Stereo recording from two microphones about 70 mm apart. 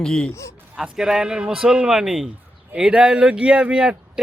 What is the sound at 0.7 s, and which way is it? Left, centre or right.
Speech, centre.